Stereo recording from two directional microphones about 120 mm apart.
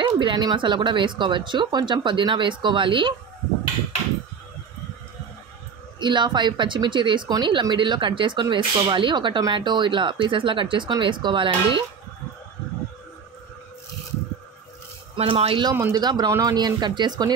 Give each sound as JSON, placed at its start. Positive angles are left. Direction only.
{"t": 0.0, "sound": "speech", "side_deg": -40}
{"t": 5.9, "sound": "speech", "side_deg": -40}
{"t": 15.1, "sound": "speech", "side_deg": -50}
{"t": 15.7, "sound": "speech", "side_deg": -20}
{"t": 16.0, "sound": "speech", "side_deg": -35}